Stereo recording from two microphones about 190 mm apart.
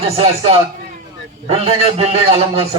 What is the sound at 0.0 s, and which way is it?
A man's voice, 30° right (ahead or behind).